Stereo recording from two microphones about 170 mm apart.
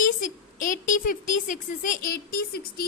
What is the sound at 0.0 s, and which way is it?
A woman's voice, 50° left (ahead or behind).